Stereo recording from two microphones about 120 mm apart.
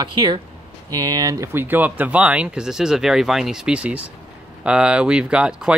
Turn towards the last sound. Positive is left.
turn(degrees=-5)  # may be behind; listen again after turning